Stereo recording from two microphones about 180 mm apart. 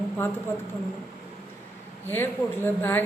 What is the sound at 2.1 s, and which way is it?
Speech, 10° left (ahead or behind).